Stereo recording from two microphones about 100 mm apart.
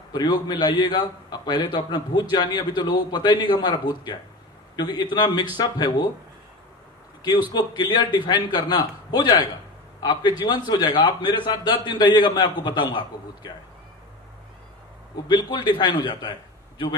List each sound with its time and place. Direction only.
0.1 s a man's voice: 40° left (ahead or behind)
7.2 s a man's voice: 45° left (ahead or behind)
15.4 s a man's voice: 45° left (ahead or behind)